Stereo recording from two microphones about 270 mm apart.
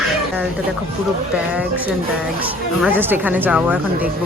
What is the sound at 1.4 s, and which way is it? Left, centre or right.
Speech, centre.